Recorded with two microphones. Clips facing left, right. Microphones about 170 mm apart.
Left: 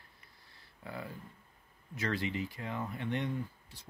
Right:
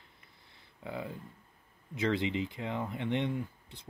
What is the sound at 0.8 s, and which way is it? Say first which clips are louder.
Speech: right 4 dB; 20° right (ahead or behind).